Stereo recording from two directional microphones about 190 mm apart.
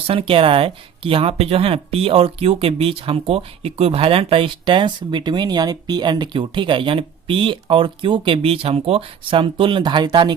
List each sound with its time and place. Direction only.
0.1 s speech: 30° right (ahead or behind)